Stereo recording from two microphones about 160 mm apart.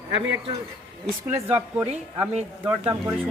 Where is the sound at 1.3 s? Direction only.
10° right (ahead or behind).